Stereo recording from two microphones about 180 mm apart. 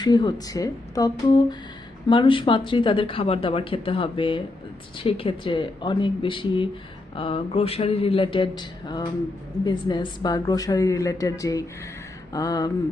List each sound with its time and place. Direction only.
0.0 s speech: 25° left (ahead or behind)